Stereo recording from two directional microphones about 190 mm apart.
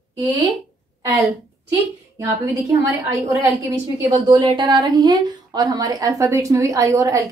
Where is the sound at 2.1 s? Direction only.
15° right (ahead or behind).